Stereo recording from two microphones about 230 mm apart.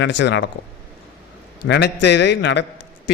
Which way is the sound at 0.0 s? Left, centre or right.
Left.